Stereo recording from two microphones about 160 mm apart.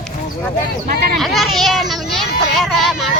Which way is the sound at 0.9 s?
75° right (ahead or behind).